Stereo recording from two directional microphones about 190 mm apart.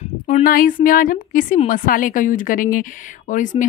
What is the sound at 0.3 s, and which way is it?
A woman's voice, 45° left (ahead or behind).